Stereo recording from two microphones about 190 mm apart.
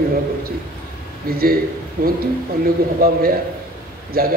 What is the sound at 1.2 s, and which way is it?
A man's voice, 50° right (ahead or behind).